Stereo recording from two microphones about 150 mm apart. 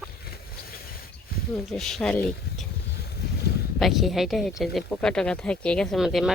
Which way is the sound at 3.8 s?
Centre (ahead or behind).